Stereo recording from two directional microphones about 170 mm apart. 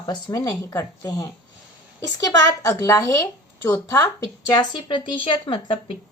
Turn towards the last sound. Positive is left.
turn(degrees=30)  # may be behind; listen again after turning